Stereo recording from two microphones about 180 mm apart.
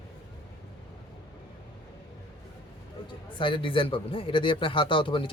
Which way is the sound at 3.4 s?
30° left (ahead or behind).